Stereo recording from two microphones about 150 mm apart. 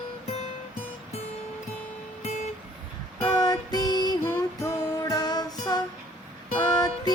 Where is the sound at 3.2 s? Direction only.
25° left (ahead or behind).